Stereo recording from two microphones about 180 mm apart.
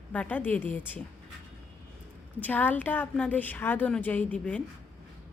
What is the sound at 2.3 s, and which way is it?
A woman's voice, 10° left (ahead or behind).